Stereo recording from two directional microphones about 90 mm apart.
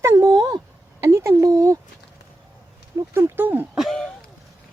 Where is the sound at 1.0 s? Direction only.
35° right (ahead or behind).